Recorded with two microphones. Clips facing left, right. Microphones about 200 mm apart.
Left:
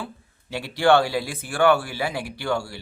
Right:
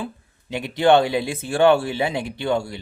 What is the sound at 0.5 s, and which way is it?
Speech, 20° right (ahead or behind).